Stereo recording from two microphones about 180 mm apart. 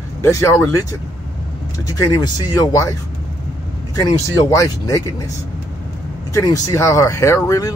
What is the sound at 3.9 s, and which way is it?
Speech, 20° left (ahead or behind).